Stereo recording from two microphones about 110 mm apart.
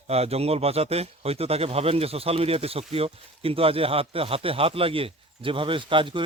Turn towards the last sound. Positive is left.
turn(degrees=-50)  # may be behind; listen again after turning